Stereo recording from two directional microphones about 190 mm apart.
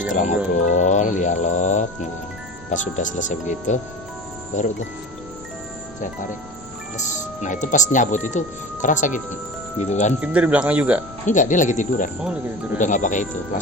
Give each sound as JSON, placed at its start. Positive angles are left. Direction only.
{"t": 0.1, "sound": "speech", "side_deg": 40}
{"t": 6.9, "sound": "speech", "side_deg": 40}
{"t": 10.2, "sound": "speech", "side_deg": -10}
{"t": 11.3, "sound": "speech", "side_deg": 40}